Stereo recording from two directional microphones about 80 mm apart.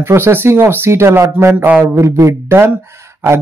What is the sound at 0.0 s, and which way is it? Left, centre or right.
Speech, right.